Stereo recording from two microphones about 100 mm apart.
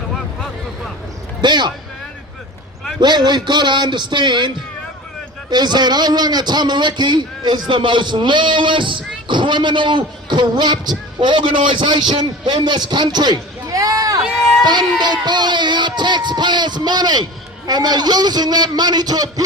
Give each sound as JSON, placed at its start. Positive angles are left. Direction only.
{"t": 1.4, "sound": "a man's voice", "side_deg": -50}
{"t": 3.0, "sound": "a man's voice", "side_deg": -45}
{"t": 14.6, "sound": "a man's voice", "side_deg": -45}